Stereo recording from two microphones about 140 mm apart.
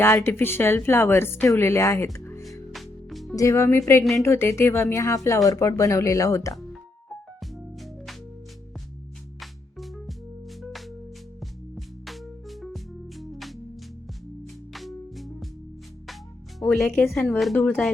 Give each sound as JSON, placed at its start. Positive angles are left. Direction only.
{"t": 0.0, "sound": "a woman's voice", "side_deg": 15}
{"t": 2.1, "sound": "music", "side_deg": 20}
{"t": 2.7, "sound": "music", "side_deg": 0}
{"t": 3.3, "sound": "speech", "side_deg": 20}
{"t": 7.1, "sound": "music", "side_deg": 0}
{"t": 9.4, "sound": "music", "side_deg": 0}
{"t": 16.6, "sound": "music", "side_deg": 0}
{"t": 16.8, "sound": "a woman's voice", "side_deg": 10}
{"t": 17.1, "sound": "a woman's voice", "side_deg": 0}